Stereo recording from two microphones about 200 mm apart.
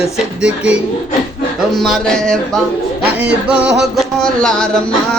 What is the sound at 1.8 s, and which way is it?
Music, centre (ahead or behind).